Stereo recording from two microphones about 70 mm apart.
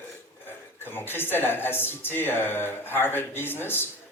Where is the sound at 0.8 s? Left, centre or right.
Left.